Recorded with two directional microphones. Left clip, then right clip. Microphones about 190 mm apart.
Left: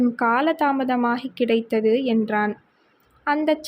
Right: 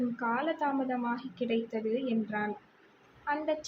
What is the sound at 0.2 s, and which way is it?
Speech, 60° left (ahead or behind).